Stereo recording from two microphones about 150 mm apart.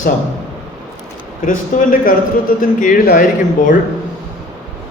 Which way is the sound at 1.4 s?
65° left (ahead or behind).